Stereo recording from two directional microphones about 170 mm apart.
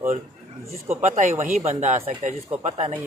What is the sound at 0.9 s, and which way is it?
Speech, 45° right (ahead or behind).